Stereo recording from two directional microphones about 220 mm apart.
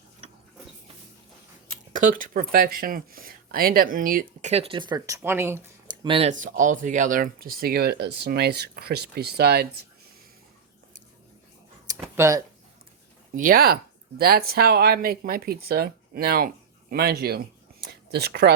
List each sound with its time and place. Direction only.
1.9 s speech: 35° right (ahead or behind)
11.9 s a sound: 15° right (ahead or behind)
13.3 s speech: 40° right (ahead or behind)